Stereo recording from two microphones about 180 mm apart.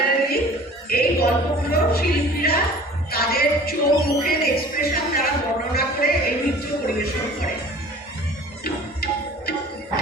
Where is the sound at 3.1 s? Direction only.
60° left (ahead or behind).